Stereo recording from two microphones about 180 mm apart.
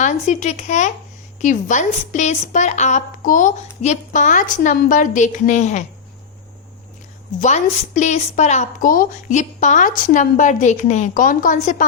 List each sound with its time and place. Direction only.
0.0 s a woman's voice: 45° left (ahead or behind)
7.3 s a woman's voice: 40° left (ahead or behind)